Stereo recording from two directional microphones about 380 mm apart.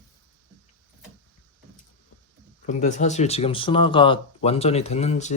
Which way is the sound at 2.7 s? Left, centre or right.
Centre.